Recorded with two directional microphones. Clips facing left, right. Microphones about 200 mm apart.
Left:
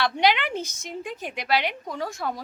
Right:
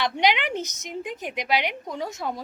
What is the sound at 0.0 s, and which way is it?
A woman's voice, 15° right (ahead or behind).